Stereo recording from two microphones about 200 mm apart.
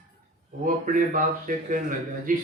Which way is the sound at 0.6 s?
45° right (ahead or behind).